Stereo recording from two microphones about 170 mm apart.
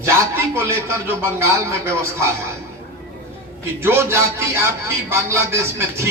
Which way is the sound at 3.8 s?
15° right (ahead or behind).